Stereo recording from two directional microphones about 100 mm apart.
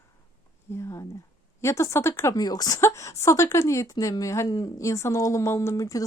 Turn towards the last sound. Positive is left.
turn(degrees=35)  # may be behind; listen again after turning